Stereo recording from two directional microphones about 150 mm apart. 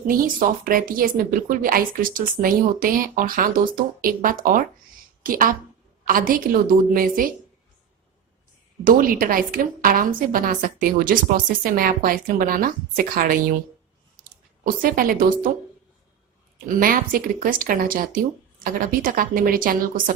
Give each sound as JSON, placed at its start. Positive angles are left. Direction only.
{"t": 0.1, "sound": "speech", "side_deg": -70}
{"t": 8.8, "sound": "speech", "side_deg": -70}
{"t": 14.6, "sound": "speech", "side_deg": -70}
{"t": 16.6, "sound": "speech", "side_deg": -70}